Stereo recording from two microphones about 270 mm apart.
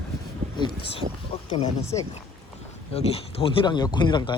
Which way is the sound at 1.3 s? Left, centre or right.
Left.